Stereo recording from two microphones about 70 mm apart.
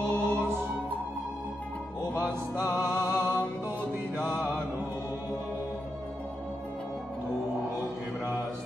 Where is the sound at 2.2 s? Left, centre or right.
Left.